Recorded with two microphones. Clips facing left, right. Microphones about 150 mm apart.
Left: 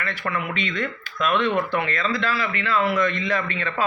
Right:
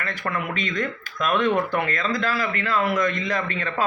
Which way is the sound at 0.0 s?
45° right (ahead or behind).